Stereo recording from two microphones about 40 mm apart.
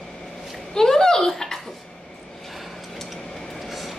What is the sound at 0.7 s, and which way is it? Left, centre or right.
Speech, centre.